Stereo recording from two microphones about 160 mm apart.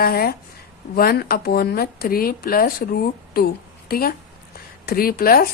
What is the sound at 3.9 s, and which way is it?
A woman's voice, 70° left (ahead or behind).